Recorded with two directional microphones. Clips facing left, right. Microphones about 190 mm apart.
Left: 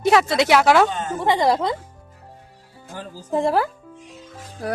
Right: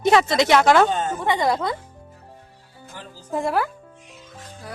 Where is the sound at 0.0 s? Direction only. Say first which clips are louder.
Even; 5° left (ahead or behind).